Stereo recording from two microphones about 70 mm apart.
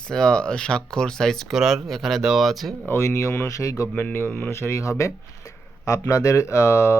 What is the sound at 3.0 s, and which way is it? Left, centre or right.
Speech, left.